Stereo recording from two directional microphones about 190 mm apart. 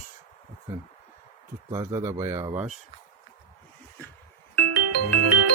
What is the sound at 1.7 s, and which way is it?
Speech, 15° right (ahead or behind).